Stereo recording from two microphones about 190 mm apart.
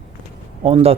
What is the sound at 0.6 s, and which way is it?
Speech, 30° right (ahead or behind).